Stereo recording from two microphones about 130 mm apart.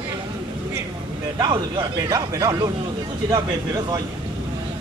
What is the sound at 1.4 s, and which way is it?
Speech, 30° right (ahead or behind).